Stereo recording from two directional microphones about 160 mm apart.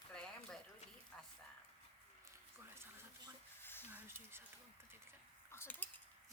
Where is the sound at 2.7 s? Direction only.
15° right (ahead or behind).